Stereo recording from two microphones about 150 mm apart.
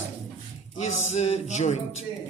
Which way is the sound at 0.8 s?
50° left (ahead or behind).